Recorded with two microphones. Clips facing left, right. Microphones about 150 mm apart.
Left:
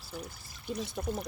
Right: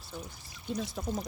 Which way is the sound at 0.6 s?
5° left (ahead or behind).